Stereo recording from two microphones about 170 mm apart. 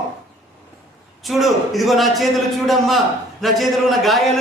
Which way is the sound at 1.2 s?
Centre (ahead or behind).